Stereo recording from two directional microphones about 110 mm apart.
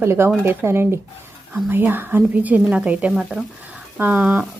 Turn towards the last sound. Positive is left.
turn(degrees=-15)  # may be behind; listen again after turning